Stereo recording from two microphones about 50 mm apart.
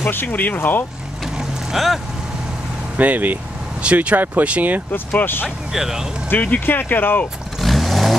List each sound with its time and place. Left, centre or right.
0.0 s speech: left
1.2 s vehicle: centre
3.0 s speech: right
5.2 s speech: left
5.7 s speech: centre
6.2 s speech: left
7.5 s vehicle: centre